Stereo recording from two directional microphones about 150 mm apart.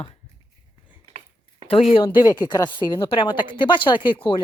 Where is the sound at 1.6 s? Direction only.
40° left (ahead or behind).